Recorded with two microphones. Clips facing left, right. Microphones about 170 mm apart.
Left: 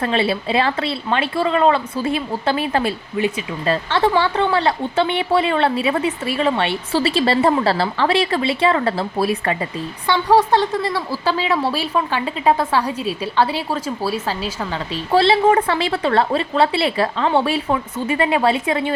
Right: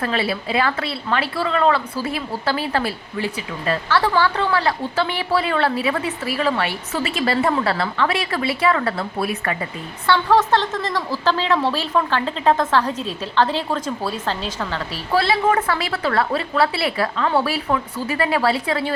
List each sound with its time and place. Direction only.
0.0 s a woman's voice: 25° left (ahead or behind)
10.1 s a woman's voice: 15° left (ahead or behind)
14.9 s a woman's voice: 25° left (ahead or behind)